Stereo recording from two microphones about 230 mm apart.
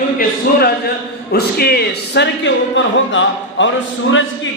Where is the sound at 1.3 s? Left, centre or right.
Left.